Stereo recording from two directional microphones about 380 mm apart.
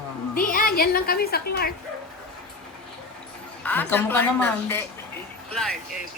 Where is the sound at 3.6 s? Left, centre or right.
Centre.